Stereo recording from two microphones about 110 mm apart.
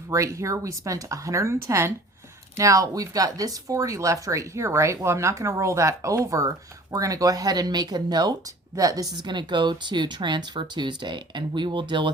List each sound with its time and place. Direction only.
0.1 s speech: 25° right (ahead or behind); by 12.1 s 45° right (ahead or behind)